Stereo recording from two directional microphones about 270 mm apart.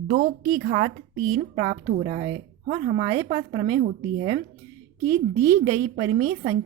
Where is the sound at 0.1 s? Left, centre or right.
Right.